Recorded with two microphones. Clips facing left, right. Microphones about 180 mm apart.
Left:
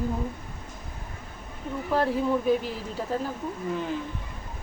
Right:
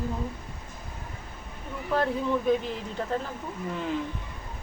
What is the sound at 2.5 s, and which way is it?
Speech, 5° left (ahead or behind).